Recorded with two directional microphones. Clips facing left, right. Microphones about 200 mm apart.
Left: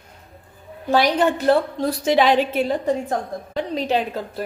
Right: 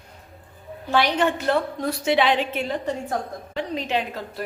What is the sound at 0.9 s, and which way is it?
A woman's voice, 40° left (ahead or behind).